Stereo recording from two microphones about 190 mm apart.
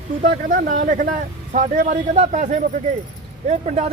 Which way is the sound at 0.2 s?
45° right (ahead or behind).